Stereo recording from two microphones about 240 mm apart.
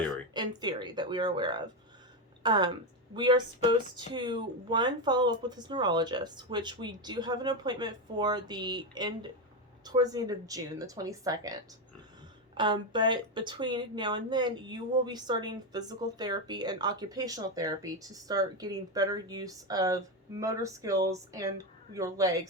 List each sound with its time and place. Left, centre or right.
0.3 s speech: centre